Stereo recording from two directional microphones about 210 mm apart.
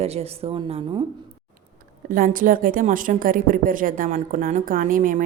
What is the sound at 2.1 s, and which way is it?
A woman's voice, 40° right (ahead or behind).